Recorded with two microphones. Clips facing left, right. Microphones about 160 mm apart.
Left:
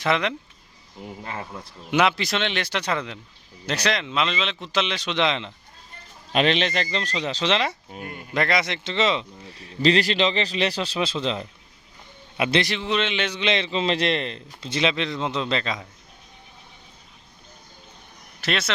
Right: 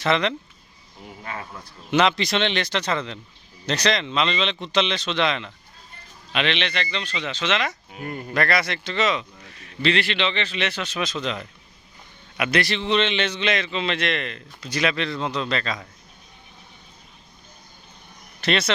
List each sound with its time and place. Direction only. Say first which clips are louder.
0.0 s a man's voice: right 1 dB; 10° left (ahead or behind)
1.2 s a man's voice: even; 25° left (ahead or behind)
1.9 s a man's voice: right 1 dB; 10° left (ahead or behind)
6.3 s speech: left 4 dB; 40° left (ahead or behind)
8.3 s a man's voice: even; 20° left (ahead or behind)
12.7 s a man's voice: right 3 dB; 5° left (ahead or behind)
13.5 s a man's voice: left 2 dB; 30° left (ahead or behind)
18.3 s a man's voice: right 3 dB; 5° left (ahead or behind)